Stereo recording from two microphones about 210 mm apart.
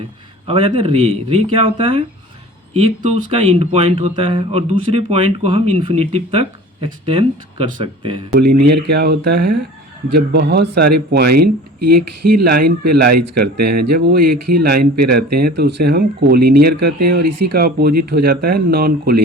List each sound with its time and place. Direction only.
0.4 s speech: 25° right (ahead or behind)
8.4 s speech: 50° right (ahead or behind)
12.5 s speech: 45° right (ahead or behind)